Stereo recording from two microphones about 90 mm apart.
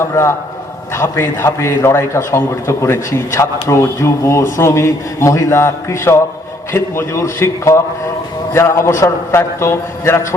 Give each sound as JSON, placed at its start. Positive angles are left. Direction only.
{"t": 0.0, "sound": "a man's voice", "side_deg": 30}